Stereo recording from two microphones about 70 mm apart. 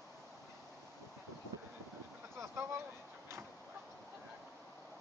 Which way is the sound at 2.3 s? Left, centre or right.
Right.